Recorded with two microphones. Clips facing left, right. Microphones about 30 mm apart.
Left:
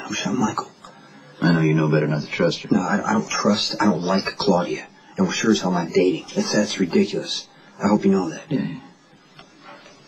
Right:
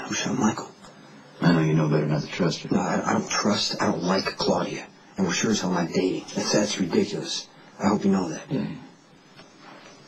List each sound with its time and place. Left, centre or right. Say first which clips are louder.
0.0 s speech: left 2 dB; centre
1.8 s speech: left 4 dB; centre